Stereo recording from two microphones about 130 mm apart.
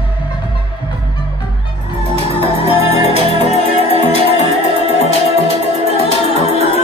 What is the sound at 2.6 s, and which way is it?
Music, 50° left (ahead or behind).